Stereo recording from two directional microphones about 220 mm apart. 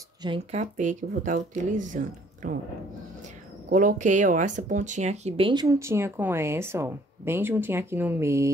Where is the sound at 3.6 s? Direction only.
35° right (ahead or behind); by 8.5 s 10° right (ahead or behind).